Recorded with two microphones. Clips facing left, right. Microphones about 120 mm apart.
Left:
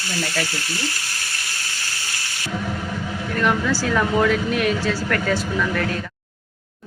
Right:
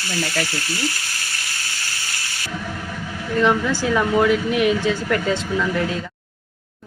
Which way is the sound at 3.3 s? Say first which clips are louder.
Right 3 dB; 20° right (ahead or behind).